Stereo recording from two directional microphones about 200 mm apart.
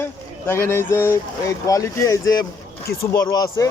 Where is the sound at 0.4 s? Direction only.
10° left (ahead or behind).